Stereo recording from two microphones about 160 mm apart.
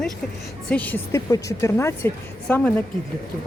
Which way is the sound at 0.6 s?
10° left (ahead or behind).